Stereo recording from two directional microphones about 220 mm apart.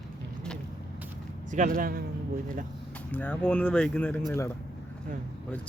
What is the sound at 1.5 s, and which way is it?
Speech, 35° right (ahead or behind).